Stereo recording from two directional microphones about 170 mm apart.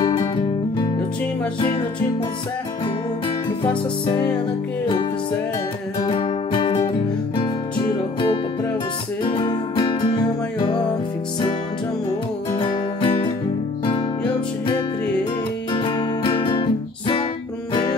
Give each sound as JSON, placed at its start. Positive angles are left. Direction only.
{"t": 0.0, "sound": "music", "side_deg": 25}
{"t": 1.6, "sound": "music", "side_deg": 30}
{"t": 3.6, "sound": "music", "side_deg": 25}
{"t": 6.0, "sound": "music", "side_deg": 30}
{"t": 12.5, "sound": "music", "side_deg": 30}
{"t": 15.7, "sound": "music", "side_deg": 30}